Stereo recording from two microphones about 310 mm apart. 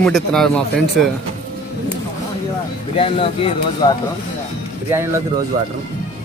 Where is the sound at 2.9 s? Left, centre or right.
Centre.